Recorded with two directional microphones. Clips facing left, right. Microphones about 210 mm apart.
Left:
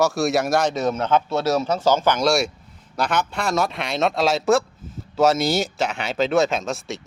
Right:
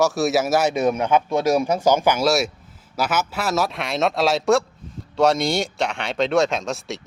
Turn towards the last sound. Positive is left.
turn(degrees=0)  # may be behind; listen again after turning